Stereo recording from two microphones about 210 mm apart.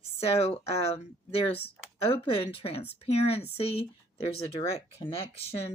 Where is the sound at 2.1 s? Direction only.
25° left (ahead or behind).